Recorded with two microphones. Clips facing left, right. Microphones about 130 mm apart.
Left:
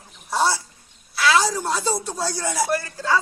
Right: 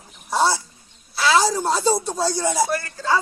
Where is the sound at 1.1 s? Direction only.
30° right (ahead or behind).